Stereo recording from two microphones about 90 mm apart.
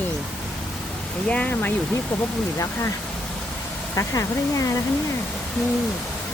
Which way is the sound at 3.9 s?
35° left (ahead or behind).